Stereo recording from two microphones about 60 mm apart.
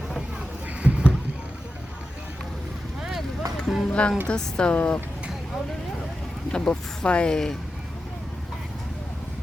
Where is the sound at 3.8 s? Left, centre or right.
Centre.